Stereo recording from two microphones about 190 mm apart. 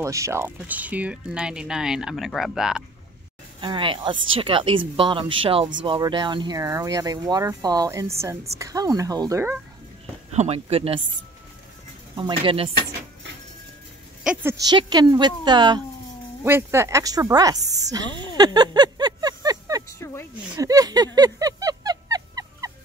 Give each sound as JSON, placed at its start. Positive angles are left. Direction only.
{"t": 0.0, "sound": "speech", "side_deg": -15}
{"t": 3.6, "sound": "speech", "side_deg": -25}
{"t": 10.3, "sound": "speech", "side_deg": -35}
{"t": 12.2, "sound": "speech", "side_deg": -25}
{"t": 14.2, "sound": "speech", "side_deg": -10}
{"t": 16.4, "sound": "speech", "side_deg": -10}
{"t": 17.9, "sound": "a sound", "side_deg": -20}